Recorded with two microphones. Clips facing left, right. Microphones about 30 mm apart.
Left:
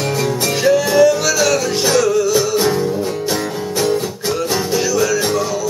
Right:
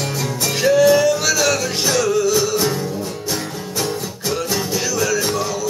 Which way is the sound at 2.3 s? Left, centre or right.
Centre.